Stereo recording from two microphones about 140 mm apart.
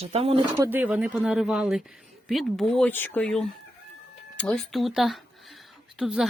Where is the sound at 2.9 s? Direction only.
15° left (ahead or behind).